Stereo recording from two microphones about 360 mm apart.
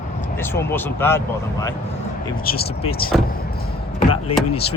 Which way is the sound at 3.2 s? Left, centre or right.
Left.